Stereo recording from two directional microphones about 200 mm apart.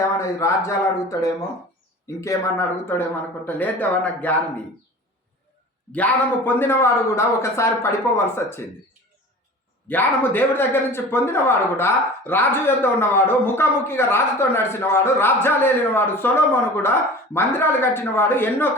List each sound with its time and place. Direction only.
0.2 s a man's voice: 15° left (ahead or behind)
5.9 s a man's voice: 5° left (ahead or behind)
9.9 s a man's voice: 10° left (ahead or behind)